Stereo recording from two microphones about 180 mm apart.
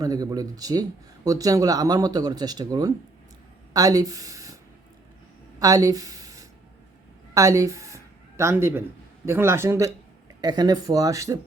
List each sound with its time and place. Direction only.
0.0 s speech: 20° right (ahead or behind)
5.5 s a sound: 20° right (ahead or behind)
7.3 s speech: 20° right (ahead or behind)